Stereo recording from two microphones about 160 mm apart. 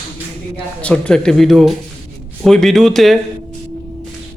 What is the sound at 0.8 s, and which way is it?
Speech, 5° left (ahead or behind).